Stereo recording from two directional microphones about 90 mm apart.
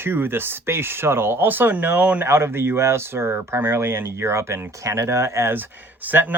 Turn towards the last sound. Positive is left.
turn(degrees=-20)  # may be behind; listen again after turning